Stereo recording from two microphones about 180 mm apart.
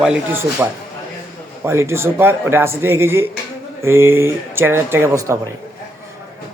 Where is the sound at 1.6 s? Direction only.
15° right (ahead or behind).